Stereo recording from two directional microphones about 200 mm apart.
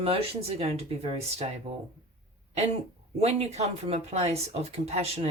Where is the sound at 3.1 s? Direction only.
30° right (ahead or behind).